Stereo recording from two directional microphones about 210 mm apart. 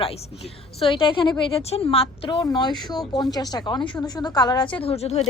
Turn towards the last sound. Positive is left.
turn(degrees=30)  # may be behind; listen again after turning